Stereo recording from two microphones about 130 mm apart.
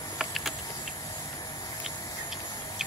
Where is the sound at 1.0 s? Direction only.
30° left (ahead or behind).